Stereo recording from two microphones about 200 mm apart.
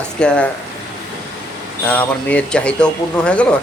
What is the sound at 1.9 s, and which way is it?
Speech, 5° left (ahead or behind).